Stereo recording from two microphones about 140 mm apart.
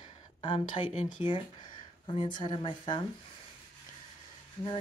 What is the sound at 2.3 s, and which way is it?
Speech, 30° left (ahead or behind).